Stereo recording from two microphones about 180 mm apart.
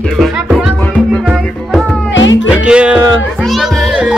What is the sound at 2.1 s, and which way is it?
Music, 90° left.